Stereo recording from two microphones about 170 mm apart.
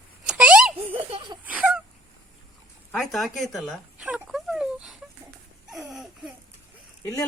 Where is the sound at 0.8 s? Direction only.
35° right (ahead or behind).